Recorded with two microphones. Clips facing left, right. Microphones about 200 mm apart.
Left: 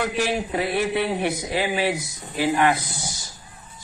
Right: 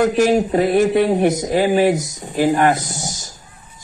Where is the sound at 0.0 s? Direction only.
45° right (ahead or behind).